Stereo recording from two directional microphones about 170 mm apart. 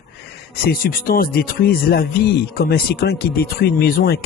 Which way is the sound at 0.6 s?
60° left (ahead or behind).